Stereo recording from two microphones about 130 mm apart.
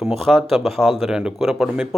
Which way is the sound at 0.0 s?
Centre (ahead or behind).